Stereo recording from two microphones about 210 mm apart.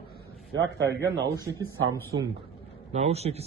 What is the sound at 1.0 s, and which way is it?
Speech, 15° right (ahead or behind).